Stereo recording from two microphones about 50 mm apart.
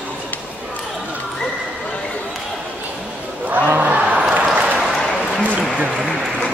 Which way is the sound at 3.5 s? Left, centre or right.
Right.